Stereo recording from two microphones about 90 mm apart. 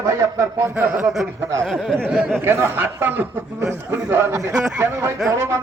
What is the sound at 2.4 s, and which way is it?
Speech, 25° right (ahead or behind).